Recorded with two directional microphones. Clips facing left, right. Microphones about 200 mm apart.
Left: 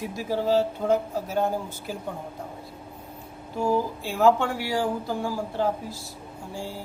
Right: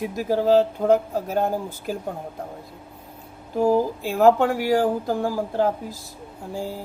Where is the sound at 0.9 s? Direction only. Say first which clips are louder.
Right 5 dB; 55° right (ahead or behind).